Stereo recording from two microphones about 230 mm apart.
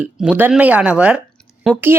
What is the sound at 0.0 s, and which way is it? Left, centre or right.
Speech, centre.